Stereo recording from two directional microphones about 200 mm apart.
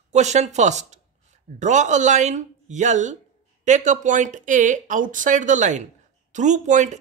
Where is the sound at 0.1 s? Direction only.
35° right (ahead or behind).